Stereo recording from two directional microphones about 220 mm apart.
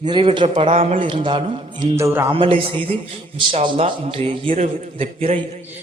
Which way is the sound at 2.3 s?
25° right (ahead or behind).